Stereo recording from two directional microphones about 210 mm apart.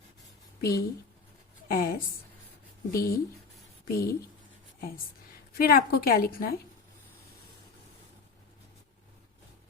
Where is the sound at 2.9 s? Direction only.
45° left (ahead or behind).